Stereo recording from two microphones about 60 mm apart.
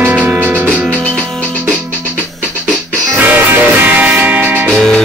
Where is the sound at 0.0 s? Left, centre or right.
Right.